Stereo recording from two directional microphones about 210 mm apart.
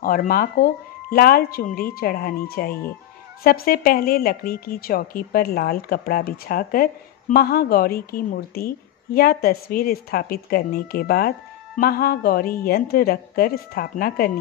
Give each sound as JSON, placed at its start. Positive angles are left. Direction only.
{"t": 0.0, "sound": "a woman's voice", "side_deg": 45}